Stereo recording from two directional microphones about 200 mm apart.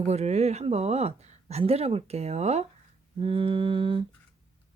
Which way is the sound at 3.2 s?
25° right (ahead or behind).